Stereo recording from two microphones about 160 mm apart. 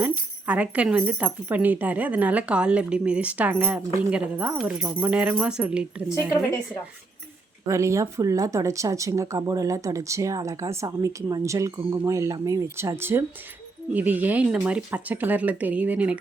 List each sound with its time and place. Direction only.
0.0 s speech: 10° right (ahead or behind)
7.7 s speech: 20° right (ahead or behind)